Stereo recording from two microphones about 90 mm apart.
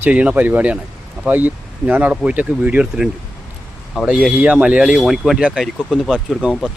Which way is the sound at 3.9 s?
Centre (ahead or behind).